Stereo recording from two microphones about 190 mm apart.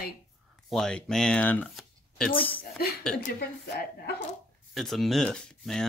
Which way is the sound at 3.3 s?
55° left (ahead or behind).